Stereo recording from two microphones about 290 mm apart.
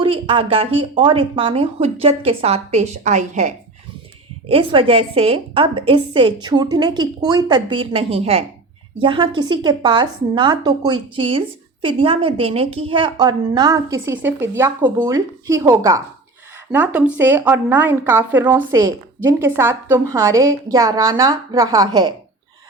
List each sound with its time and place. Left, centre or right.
0.0 s a woman's voice: centre